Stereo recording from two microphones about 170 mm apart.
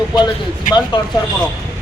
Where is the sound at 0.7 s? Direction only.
50° left (ahead or behind).